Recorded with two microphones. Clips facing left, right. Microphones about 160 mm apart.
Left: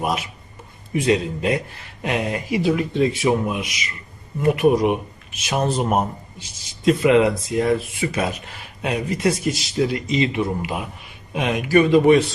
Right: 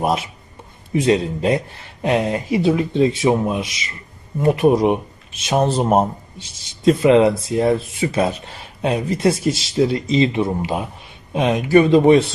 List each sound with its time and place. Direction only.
0.0 s speech: 30° right (ahead or behind)